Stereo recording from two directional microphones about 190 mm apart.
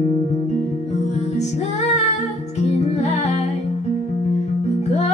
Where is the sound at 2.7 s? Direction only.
35° left (ahead or behind).